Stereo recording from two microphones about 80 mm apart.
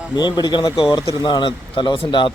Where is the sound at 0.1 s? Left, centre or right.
Left.